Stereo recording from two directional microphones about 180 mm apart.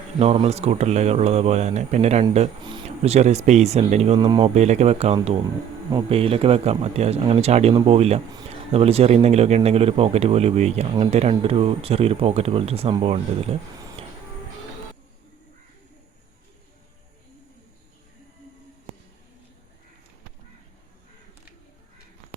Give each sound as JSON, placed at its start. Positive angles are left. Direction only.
{"t": 0.2, "sound": "speech", "side_deg": -35}